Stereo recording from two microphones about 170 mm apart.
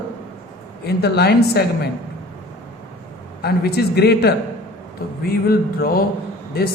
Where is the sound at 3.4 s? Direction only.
70° left (ahead or behind).